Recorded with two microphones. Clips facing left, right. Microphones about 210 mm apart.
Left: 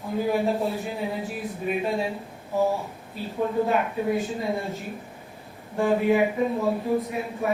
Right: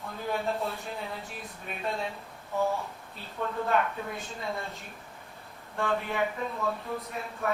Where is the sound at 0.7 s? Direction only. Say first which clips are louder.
Left 8 dB; 5° left (ahead or behind).